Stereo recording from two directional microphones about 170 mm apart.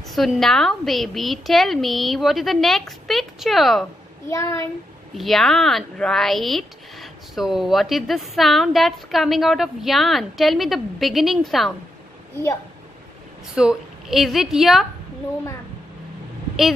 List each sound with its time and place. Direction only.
0.1 s speech: centre (ahead or behind)
4.3 s speech: 15° left (ahead or behind)
5.1 s speech: centre (ahead or behind)
13.6 s speech: 5° right (ahead or behind)